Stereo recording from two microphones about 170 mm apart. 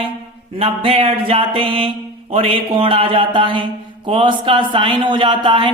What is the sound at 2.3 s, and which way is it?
Speech, 30° right (ahead or behind).